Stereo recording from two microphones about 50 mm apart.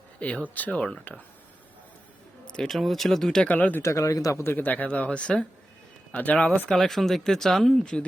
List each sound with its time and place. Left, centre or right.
0.2 s speech: left
2.5 s speech: centre
2.7 s speech: centre
3.5 s speech: left
3.8 s speech: left
4.5 s speech: left
4.9 s speech: left
6.1 s speech: left
6.3 s speech: centre
6.7 s speech: centre